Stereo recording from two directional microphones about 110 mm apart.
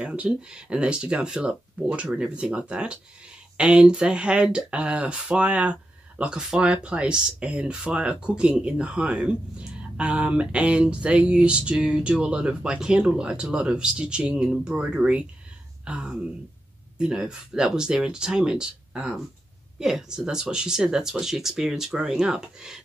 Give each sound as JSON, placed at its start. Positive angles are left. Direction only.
{"t": 0.0, "sound": "speech", "side_deg": -10}